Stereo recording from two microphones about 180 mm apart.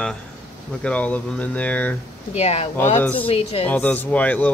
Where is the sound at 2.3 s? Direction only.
35° left (ahead or behind).